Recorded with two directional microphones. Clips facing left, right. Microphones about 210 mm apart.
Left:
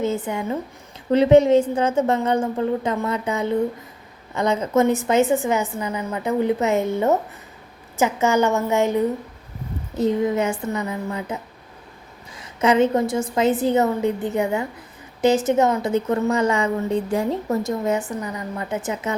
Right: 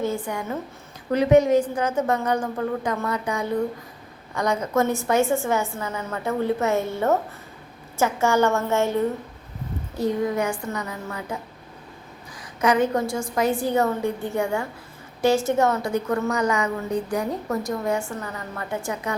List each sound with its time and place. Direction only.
0.0 s a woman's voice: 20° left (ahead or behind)
12.4 s a woman's voice: 25° left (ahead or behind)